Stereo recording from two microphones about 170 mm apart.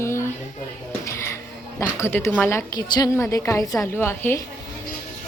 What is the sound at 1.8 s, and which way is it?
A woman's voice, 15° left (ahead or behind).